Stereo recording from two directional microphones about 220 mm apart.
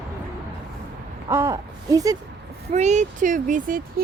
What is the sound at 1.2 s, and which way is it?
Speech, 15° right (ahead or behind).